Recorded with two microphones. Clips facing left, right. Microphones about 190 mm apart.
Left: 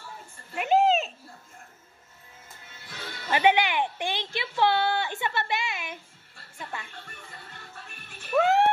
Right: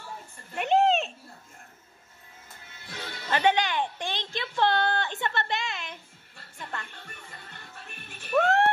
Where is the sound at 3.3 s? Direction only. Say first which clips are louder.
Left 2 dB; 15° left (ahead or behind).